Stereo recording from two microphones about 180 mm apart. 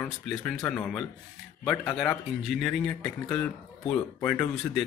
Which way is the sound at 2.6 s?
5° left (ahead or behind).